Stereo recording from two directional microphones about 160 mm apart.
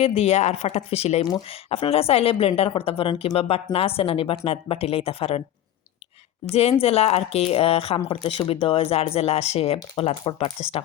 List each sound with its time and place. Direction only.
0.0 s speech: 40° left (ahead or behind)
6.5 s speech: 40° left (ahead or behind)